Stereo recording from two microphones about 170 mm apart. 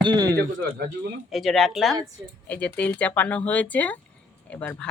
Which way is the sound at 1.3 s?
Centre (ahead or behind).